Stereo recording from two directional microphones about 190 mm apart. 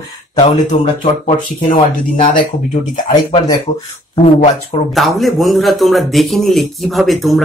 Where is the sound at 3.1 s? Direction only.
20° left (ahead or behind).